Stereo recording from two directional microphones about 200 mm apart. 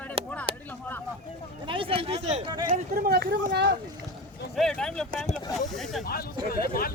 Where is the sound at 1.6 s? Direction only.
25° right (ahead or behind).